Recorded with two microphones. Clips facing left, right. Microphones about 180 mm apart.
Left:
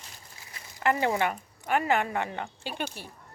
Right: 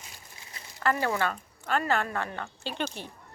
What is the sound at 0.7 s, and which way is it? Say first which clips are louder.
Speech: left 2 dB; 20° left (ahead or behind).